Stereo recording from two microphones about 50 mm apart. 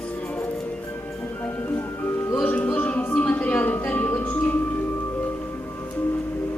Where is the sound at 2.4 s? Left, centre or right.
Left.